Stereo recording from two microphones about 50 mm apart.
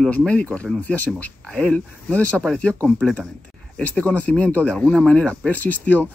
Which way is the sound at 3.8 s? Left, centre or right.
Left.